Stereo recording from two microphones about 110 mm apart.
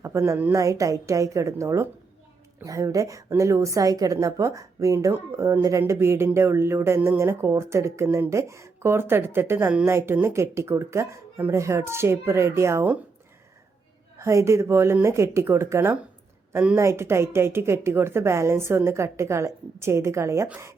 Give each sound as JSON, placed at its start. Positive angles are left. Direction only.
{"t": 0.0, "sound": "a woman's voice", "side_deg": -25}
{"t": 14.2, "sound": "a woman's voice", "side_deg": -25}